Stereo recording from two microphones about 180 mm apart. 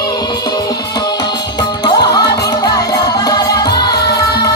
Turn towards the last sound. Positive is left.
turn(degrees=20)  # may be behind; listen again after turning